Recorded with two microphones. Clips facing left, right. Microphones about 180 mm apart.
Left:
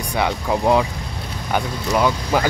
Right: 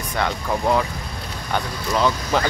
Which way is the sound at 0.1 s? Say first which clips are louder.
Left 3 dB; 15° left (ahead or behind).